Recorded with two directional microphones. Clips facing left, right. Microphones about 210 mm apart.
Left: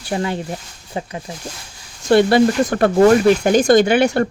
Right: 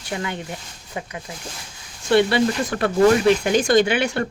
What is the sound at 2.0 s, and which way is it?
Speech, 40° left (ahead or behind).